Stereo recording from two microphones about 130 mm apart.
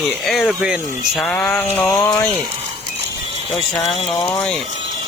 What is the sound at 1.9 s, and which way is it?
Speech, 25° left (ahead or behind).